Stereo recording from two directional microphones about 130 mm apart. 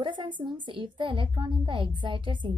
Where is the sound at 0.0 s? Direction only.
40° right (ahead or behind).